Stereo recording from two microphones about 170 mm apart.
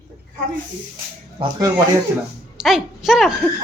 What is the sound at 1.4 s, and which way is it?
Speech, 20° right (ahead or behind).